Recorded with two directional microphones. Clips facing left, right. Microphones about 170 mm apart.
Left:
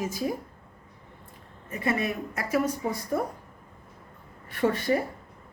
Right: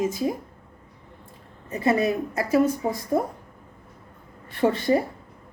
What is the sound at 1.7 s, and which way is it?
Speech, 30° right (ahead or behind).